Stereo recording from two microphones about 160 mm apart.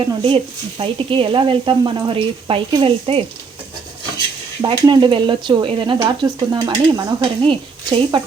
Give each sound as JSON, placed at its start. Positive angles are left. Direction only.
{"t": 0.0, "sound": "speech", "side_deg": -35}
{"t": 4.6, "sound": "speech", "side_deg": -30}